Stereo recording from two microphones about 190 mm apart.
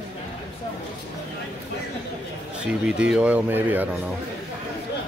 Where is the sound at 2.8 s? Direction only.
5° right (ahead or behind).